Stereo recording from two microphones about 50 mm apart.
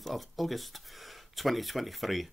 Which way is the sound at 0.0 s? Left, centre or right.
Centre.